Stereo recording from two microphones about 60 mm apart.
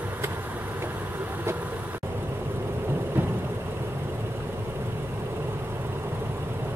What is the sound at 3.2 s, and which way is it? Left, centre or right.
Vehicle, right.